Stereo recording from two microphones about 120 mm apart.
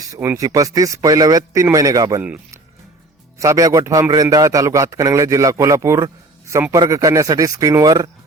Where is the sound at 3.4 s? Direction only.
25° right (ahead or behind).